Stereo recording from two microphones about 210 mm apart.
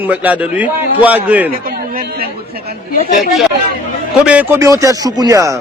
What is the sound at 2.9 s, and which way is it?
Speech, 45° left (ahead or behind).